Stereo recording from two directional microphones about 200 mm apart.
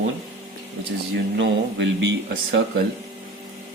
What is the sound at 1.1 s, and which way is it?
Speech, 60° right (ahead or behind).